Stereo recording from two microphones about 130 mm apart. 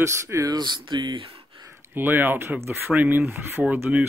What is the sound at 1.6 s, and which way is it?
Speech, 20° right (ahead or behind).